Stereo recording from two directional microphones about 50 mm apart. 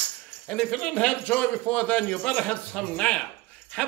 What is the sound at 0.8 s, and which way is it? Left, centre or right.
Speech, left.